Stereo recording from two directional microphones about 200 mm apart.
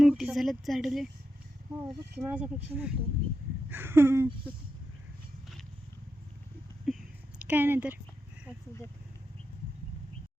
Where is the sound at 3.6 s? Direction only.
10° right (ahead or behind).